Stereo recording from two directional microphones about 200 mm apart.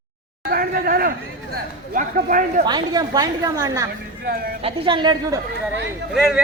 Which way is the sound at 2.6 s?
20° right (ahead or behind).